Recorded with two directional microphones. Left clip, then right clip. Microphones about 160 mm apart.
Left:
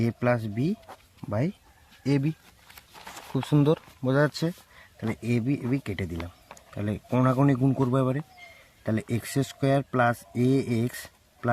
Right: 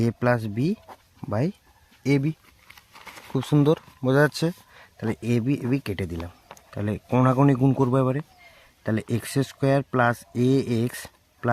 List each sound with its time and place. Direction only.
0.0 s speech: 30° right (ahead or behind)
3.3 s speech: 25° right (ahead or behind)